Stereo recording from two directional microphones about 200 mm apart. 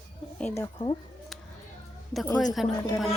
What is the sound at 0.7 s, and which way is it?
Speech, 25° left (ahead or behind).